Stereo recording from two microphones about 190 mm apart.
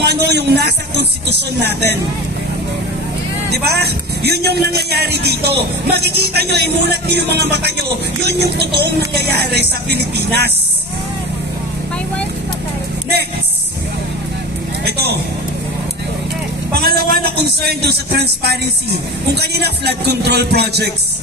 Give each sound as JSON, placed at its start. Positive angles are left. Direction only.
{"t": 0.0, "sound": "a man's voice", "side_deg": -60}
{"t": 3.4, "sound": "a man's voice", "side_deg": -60}
{"t": 14.9, "sound": "speech", "side_deg": -60}
{"t": 16.8, "sound": "a man's voice", "side_deg": -55}